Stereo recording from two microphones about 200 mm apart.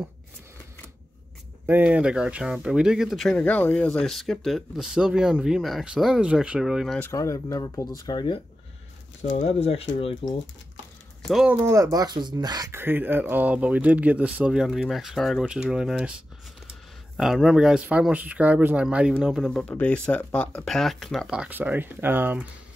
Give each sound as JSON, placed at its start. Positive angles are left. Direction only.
{"t": 1.7, "sound": "speech", "side_deg": -5}
{"t": 7.0, "sound": "speech", "side_deg": 15}
{"t": 9.2, "sound": "speech", "side_deg": 35}
{"t": 11.2, "sound": "speech", "side_deg": -5}
{"t": 17.2, "sound": "speech", "side_deg": 0}